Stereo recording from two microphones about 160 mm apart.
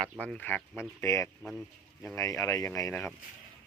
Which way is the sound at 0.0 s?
5° left (ahead or behind).